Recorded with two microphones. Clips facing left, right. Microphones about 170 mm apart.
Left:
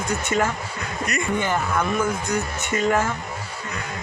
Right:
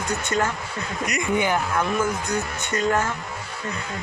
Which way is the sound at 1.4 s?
5° right (ahead or behind).